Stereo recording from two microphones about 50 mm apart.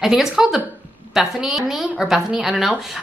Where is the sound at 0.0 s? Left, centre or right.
Centre.